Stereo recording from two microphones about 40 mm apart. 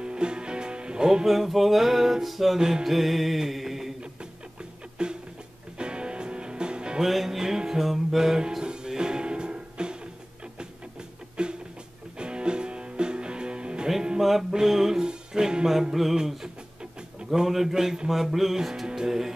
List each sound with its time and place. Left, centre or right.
0.0 s music: right
1.2 s music: centre
2.6 s speech: centre
5.0 s music: right
7.0 s music: centre; by 9.9 s right
10.4 s a sound: right
12.2 s music: right
14.5 s music: centre
17.3 s speech: centre